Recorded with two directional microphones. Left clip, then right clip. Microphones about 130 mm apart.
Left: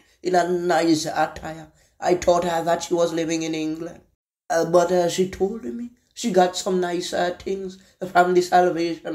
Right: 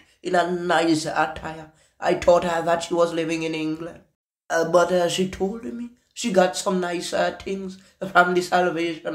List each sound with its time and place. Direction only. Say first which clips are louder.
0.2 s a sound: left 1 dB; 15° left (ahead or behind)
0.5 s speech: left 1 dB; 5° left (ahead or behind)
4.5 s speech: even; 25° left (ahead or behind)